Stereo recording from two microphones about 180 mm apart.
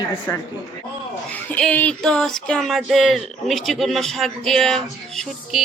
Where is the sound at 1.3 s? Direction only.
10° left (ahead or behind).